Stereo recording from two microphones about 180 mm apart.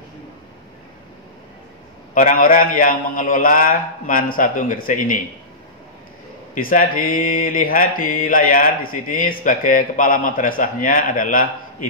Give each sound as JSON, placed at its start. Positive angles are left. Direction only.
{"t": 2.1, "sound": "mantra", "side_deg": 50}
{"t": 6.5, "sound": "mantra", "side_deg": 50}